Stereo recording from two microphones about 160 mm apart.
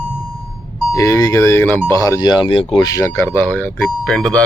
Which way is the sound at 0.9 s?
20° left (ahead or behind).